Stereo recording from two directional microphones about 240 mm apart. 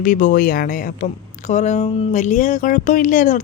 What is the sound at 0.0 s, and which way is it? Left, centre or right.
Speech, left.